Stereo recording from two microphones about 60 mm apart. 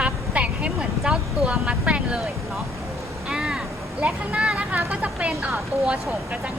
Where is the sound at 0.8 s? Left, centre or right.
Centre.